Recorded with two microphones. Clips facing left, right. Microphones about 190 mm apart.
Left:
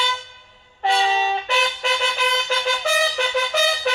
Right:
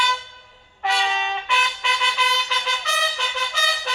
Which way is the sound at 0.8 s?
30° left (ahead or behind).